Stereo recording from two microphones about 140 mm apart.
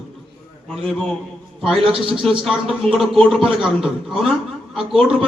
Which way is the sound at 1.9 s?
40° right (ahead or behind).